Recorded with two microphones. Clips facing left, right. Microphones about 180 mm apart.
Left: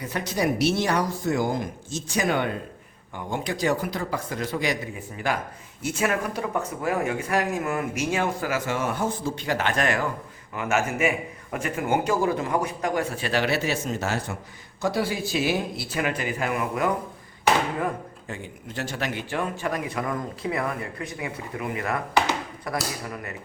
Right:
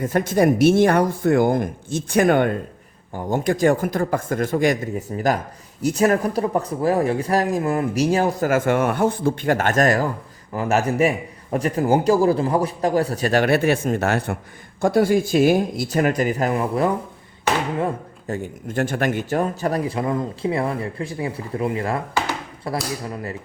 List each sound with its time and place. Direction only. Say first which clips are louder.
0.0 s speech: right 8 dB; 50° right (ahead or behind)
3.1 s speech: right 8 dB; 40° right (ahead or behind)
18.3 s speech: right 10 dB; 45° right (ahead or behind); by 23.3 s 30° right (ahead or behind)